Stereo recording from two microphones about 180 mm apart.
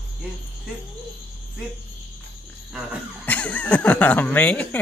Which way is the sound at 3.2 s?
10° left (ahead or behind).